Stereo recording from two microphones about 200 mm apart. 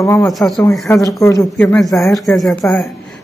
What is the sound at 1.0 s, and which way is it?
A woman's voice, 15° left (ahead or behind).